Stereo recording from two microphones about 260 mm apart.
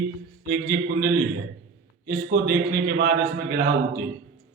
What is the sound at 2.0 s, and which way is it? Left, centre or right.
A man's voice, right.